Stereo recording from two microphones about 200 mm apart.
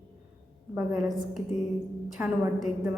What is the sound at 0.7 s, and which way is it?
A woman's voice, centre (ahead or behind).